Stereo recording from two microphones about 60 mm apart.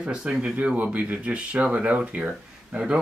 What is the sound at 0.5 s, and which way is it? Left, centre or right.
Speech, right.